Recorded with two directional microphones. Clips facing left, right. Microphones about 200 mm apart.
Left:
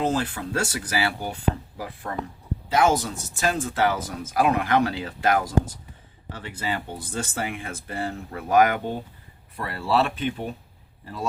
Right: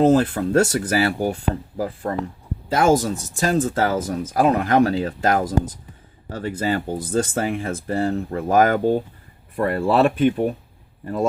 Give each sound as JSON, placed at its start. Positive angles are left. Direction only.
{"t": 0.0, "sound": "speech", "side_deg": -45}
{"t": 9.6, "sound": "a man's voice", "side_deg": -50}